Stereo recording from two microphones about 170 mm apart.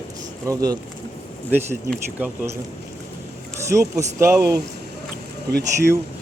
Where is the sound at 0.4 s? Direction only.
20° right (ahead or behind).